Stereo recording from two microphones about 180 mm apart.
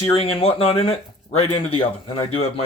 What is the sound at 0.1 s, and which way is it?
Speech, 30° left (ahead or behind).